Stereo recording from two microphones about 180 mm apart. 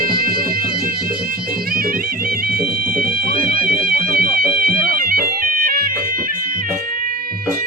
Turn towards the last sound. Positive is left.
turn(degrees=-50)  # may be behind; listen again after turning